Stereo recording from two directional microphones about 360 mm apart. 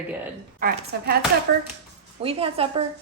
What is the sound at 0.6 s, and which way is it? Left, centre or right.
Speech, right.